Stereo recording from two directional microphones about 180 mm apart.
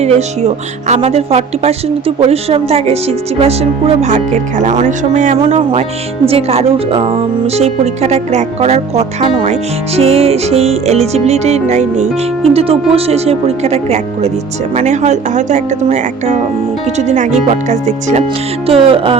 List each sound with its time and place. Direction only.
0.0 s speech: 35° right (ahead or behind)